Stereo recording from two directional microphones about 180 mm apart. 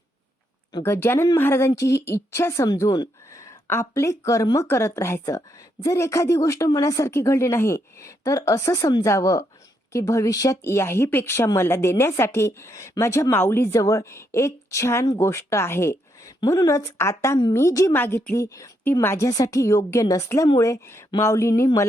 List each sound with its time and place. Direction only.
0.8 s speech: 15° left (ahead or behind)